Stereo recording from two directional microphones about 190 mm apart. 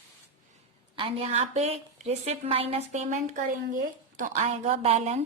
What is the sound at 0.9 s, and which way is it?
A woman's voice, 30° right (ahead or behind).